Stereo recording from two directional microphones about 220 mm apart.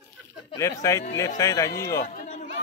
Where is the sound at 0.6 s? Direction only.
15° left (ahead or behind).